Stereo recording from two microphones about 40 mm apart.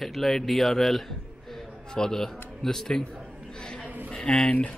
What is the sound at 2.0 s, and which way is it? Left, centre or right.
Speech, centre.